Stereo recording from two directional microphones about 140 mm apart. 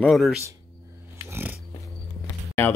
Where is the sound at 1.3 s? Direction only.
15° right (ahead or behind).